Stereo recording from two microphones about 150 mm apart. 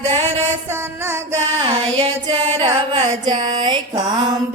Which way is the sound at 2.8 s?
30° right (ahead or behind).